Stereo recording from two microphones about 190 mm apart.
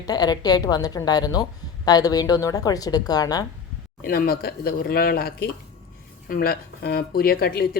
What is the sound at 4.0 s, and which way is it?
Speech, 50° left (ahead or behind).